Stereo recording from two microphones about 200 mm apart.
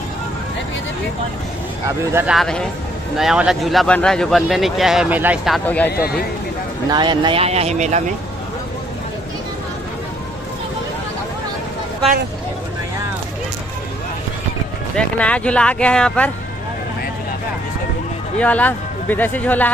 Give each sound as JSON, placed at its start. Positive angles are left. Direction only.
{"t": 2.1, "sound": "speech", "side_deg": -5}
{"t": 6.9, "sound": "speech", "side_deg": -25}
{"t": 15.0, "sound": "speech", "side_deg": 5}
{"t": 18.4, "sound": "speech", "side_deg": 5}